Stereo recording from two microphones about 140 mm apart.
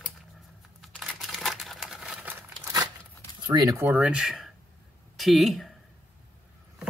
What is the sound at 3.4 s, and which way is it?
Speech, 25° right (ahead or behind).